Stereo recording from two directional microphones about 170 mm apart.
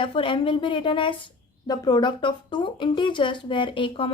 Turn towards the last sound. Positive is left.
turn(degrees=30)  # may be behind; listen again after turning